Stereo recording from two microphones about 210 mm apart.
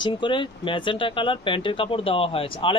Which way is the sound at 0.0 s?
20° left (ahead or behind).